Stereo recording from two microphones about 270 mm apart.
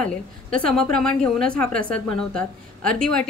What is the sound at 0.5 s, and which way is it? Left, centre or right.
A woman's voice, centre.